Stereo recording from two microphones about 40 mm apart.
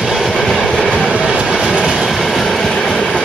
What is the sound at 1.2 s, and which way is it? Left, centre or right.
Train, right.